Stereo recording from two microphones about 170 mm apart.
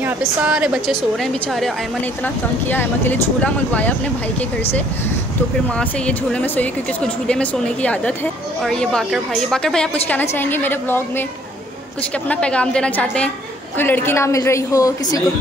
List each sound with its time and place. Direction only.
0.0 s a woman's voice: 10° right (ahead or behind); by 3.9 s 10° left (ahead or behind)
5.8 s a woman's voice: 5° left (ahead or behind)
12.3 s a woman's voice: 5° left (ahead or behind)